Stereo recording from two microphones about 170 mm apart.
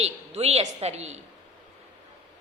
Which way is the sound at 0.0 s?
40° right (ahead or behind).